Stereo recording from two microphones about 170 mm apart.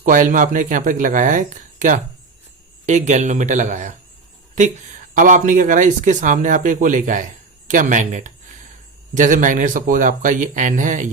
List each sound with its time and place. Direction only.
0.0 s speech: 50° right (ahead or behind)
5.1 s speech: 50° right (ahead or behind)